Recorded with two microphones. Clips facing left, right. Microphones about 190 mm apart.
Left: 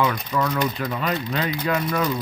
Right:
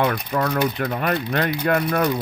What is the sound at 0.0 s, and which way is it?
Speech, 60° right (ahead or behind).